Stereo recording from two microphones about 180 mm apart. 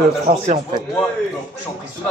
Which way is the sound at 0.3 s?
60° right (ahead or behind).